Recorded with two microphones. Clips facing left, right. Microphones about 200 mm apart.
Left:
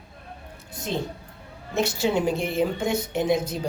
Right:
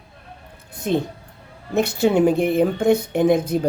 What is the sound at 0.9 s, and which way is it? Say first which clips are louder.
A woman's voice: right 8 dB; 55° right (ahead or behind).